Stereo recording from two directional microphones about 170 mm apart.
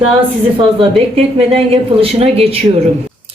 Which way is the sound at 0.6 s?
35° right (ahead or behind).